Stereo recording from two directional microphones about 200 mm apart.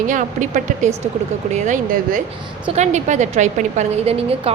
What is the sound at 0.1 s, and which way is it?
A woman's voice, 40° right (ahead or behind).